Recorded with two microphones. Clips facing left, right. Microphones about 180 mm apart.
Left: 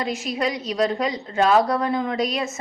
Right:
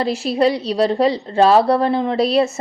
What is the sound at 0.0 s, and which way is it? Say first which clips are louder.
A woman's voice: right 8 dB; 30° right (ahead or behind).